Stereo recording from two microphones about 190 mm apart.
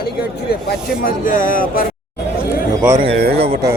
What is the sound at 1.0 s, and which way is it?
Speech, 45° left (ahead or behind).